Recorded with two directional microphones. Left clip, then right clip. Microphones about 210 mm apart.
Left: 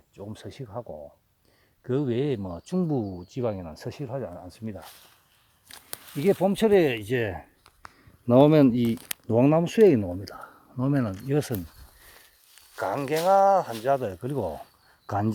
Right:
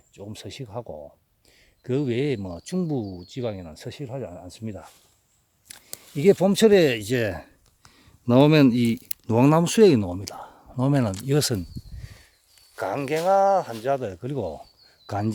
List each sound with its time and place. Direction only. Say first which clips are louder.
0.2 s speech: right 2 dB; 25° right (ahead or behind); by 4.0 s 5° right (ahead or behind)
4.0 s speech: even; 25° right (ahead or behind)
5.7 s a sound: left 1 dB; 45° left (ahead or behind)
6.1 s speech: right 5 dB; 45° right (ahead or behind)
8.3 s speech: right 1 dB; 30° right (ahead or behind)
12.7 s speech: right 1 dB; 30° right (ahead or behind)